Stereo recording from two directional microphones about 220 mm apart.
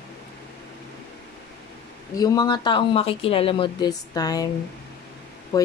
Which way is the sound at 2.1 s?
15° left (ahead or behind).